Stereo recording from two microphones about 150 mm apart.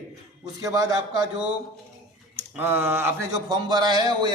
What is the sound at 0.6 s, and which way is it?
Speech, 25° right (ahead or behind).